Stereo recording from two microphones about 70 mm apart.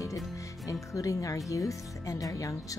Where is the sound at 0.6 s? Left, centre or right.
Left.